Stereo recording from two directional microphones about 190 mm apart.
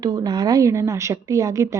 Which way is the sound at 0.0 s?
20° right (ahead or behind).